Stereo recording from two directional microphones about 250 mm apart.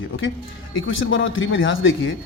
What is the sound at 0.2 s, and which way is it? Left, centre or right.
Speech, left.